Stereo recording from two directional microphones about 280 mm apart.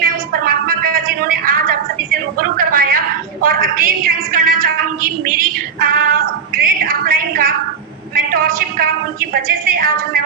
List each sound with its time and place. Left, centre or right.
0.0 s a sound: right
3.4 s a woman's voice: right
5.3 s female singing: right
8.1 s speech: right